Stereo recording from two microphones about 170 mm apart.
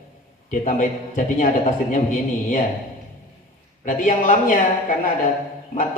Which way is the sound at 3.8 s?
50° left (ahead or behind).